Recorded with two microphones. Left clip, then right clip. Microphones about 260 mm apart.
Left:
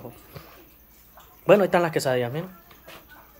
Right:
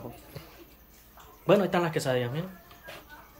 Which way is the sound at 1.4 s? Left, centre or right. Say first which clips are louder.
Left 6 dB; centre.